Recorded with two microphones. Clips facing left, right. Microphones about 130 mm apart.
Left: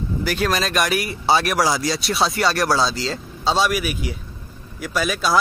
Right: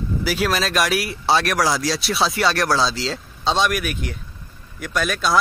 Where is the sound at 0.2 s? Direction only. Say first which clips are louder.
Even; 5° right (ahead or behind).